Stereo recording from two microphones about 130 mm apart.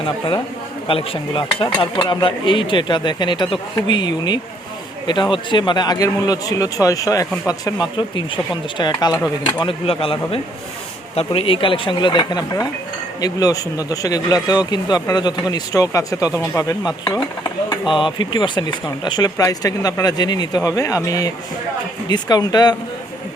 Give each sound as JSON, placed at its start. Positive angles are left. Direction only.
{"t": 0.9, "sound": "speech", "side_deg": 45}
{"t": 9.6, "sound": "speech", "side_deg": 45}
{"t": 17.8, "sound": "speech", "side_deg": 40}